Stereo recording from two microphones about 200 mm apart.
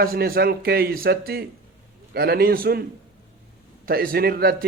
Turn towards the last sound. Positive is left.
turn(degrees=-50)  # may be behind; listen again after turning